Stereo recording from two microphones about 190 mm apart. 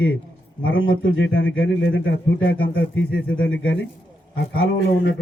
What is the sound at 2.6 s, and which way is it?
Speech, 60° left (ahead or behind).